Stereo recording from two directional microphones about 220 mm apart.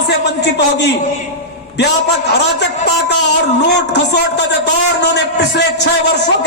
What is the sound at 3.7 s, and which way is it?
Speech, 50° left (ahead or behind).